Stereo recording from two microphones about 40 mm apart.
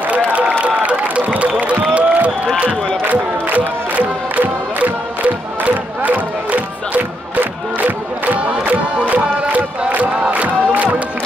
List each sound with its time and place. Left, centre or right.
0.7 s a sound: right
1.4 s crowd: right
3.5 s music: right
8.4 s music: right
9.6 s crowd: right